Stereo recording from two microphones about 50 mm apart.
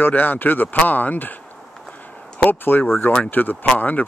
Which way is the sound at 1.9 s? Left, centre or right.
Left.